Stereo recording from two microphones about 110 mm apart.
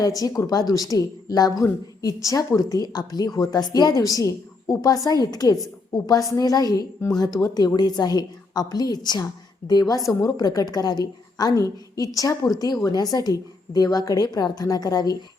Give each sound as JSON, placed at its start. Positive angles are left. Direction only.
{"t": 0.0, "sound": "a woman's voice", "side_deg": 35}